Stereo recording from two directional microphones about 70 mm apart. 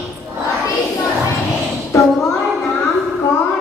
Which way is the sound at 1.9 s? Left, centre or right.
Left.